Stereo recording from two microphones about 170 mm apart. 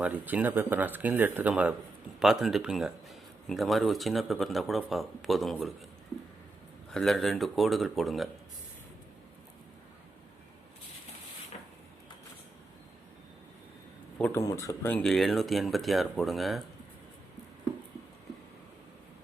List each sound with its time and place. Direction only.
0.0 s speech: 10° right (ahead or behind)
6.9 s speech: centre (ahead or behind)
11.5 s a sound: 35° left (ahead or behind)
14.2 s a man's voice: 10° left (ahead or behind)
14.9 s speech: 5° left (ahead or behind)